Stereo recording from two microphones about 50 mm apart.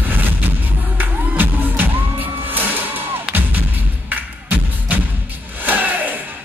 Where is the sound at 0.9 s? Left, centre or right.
Right.